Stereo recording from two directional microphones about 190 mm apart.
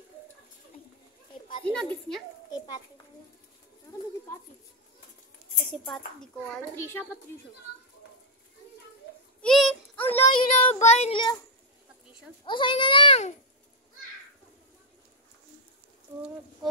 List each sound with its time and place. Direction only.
1.6 s a woman's voice: 5° left (ahead or behind)
2.5 s children playing: 20° left (ahead or behind)
5.9 s a child's voice: 5° left (ahead or behind)
9.4 s a sound: centre (ahead or behind)
10.3 s child singing: 30° left (ahead or behind)
12.4 s a child's voice: 25° left (ahead or behind)